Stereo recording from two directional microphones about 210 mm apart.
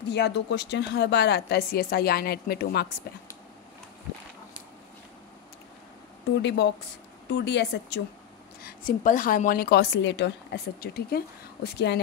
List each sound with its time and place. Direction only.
0.0 s a woman's voice: 55° left (ahead or behind)
6.4 s a woman's voice: 55° left (ahead or behind)
8.6 s a woman's voice: 40° left (ahead or behind)